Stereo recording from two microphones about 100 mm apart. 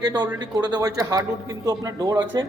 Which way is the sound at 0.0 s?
40° right (ahead or behind).